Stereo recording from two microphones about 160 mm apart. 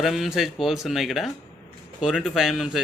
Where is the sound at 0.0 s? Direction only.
Centre (ahead or behind).